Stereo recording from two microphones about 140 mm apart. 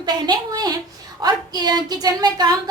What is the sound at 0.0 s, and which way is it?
A woman's voice, 30° right (ahead or behind).